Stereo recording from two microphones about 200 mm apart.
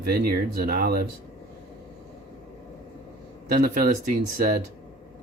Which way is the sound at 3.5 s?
45° right (ahead or behind).